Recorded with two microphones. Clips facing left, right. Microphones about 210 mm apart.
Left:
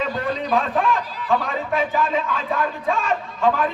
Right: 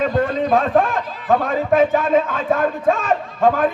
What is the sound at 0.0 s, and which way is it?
A man's voice, 50° right (ahead or behind).